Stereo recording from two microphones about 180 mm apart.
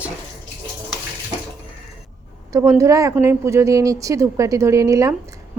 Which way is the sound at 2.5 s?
15° right (ahead or behind).